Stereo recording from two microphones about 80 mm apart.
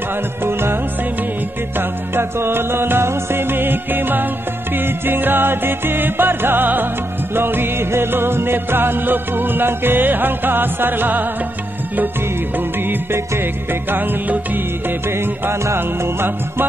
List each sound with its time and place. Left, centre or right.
0.4 s music: right
1.8 s music: right
12.5 s music: right